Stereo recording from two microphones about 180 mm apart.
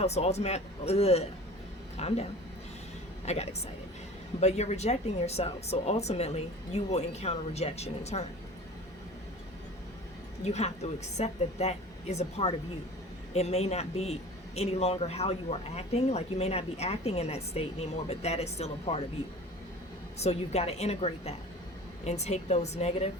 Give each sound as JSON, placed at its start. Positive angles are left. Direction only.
{"t": 0.0, "sound": "a man's voice", "side_deg": 35}
{"t": 3.2, "sound": "a man's voice", "side_deg": 35}
{"t": 10.4, "sound": "a man's voice", "side_deg": 35}
{"t": 20.1, "sound": "a man's voice", "side_deg": 35}